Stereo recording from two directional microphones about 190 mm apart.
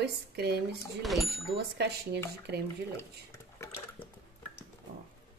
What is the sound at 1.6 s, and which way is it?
Speech, 60° right (ahead or behind).